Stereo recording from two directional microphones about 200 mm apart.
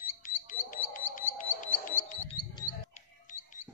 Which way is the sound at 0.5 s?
40° left (ahead or behind).